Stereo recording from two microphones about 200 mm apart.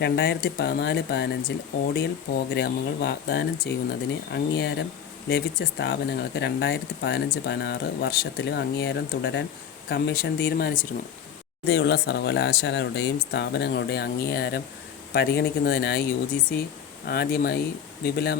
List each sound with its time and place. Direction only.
0.0 s speech: 55° left (ahead or behind)
9.9 s speech: 50° left (ahead or behind)
11.7 s speech: 60° left (ahead or behind)
17.1 s speech: 50° left (ahead or behind)